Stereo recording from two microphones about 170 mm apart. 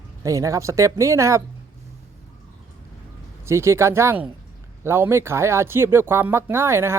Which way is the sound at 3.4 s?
15° right (ahead or behind).